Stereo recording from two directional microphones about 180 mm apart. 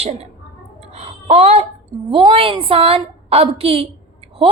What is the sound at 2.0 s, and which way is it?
A woman's voice, 30° right (ahead or behind).